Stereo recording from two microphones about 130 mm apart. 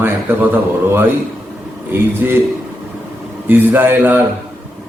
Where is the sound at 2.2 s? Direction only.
15° right (ahead or behind).